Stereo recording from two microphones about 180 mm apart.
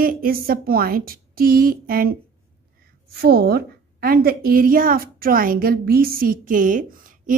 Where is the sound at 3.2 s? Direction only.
60° right (ahead or behind).